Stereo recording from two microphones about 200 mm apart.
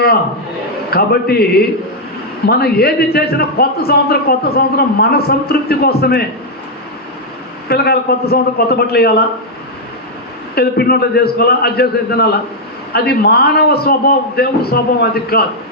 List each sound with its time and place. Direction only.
0.9 s a man's voice: 50° left (ahead or behind)
2.5 s a man's voice: 50° left (ahead or behind)
7.7 s a man's voice: 50° left (ahead or behind)
10.5 s a man's voice: 50° left (ahead or behind)